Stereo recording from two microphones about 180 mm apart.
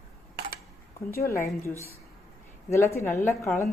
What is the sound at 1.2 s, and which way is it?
A woman's voice, 15° left (ahead or behind).